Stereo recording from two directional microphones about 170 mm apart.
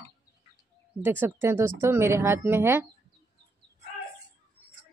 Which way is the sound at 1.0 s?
10° right (ahead or behind).